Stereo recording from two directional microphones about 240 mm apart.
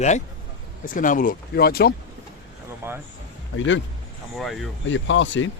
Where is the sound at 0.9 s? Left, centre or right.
Left.